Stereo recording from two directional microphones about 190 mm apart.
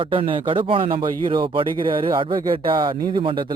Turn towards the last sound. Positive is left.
turn(degrees=-25)  # may be behind; listen again after turning